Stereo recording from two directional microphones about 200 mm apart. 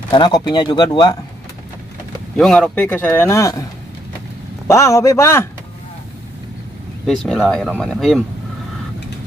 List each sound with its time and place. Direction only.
0.1 s speech: 20° left (ahead or behind)
2.3 s speech: 5° left (ahead or behind)
4.6 s speech: 15° left (ahead or behind)
7.1 s speech: centre (ahead or behind)